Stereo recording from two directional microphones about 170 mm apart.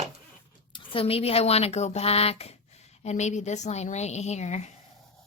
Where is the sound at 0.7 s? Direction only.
35° left (ahead or behind).